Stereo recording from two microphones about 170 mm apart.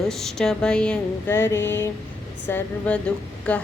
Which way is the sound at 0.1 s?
Centre (ahead or behind).